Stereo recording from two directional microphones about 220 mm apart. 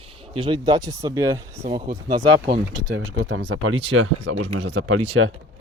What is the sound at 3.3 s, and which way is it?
Speech, 45° right (ahead or behind).